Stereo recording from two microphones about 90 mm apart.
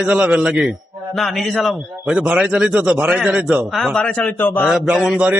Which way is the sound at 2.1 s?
10° right (ahead or behind).